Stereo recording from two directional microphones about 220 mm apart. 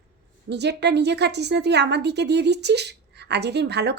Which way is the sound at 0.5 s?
50° right (ahead or behind).